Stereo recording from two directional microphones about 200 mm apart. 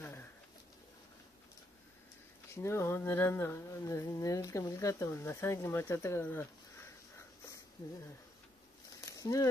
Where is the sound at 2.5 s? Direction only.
15° left (ahead or behind).